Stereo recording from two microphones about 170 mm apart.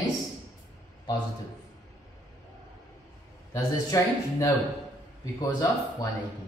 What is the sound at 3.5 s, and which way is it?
Speech, 20° left (ahead or behind).